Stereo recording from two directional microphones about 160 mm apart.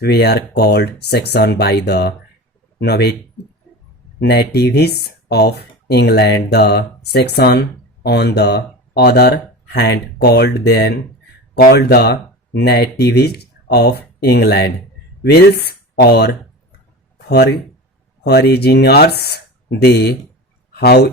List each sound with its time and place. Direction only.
0.0 s speech: 85° left
4.2 s speech: 90° left